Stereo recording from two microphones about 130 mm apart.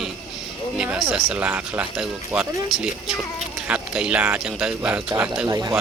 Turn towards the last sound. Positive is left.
turn(degrees=-25)  # may be behind; listen again after turning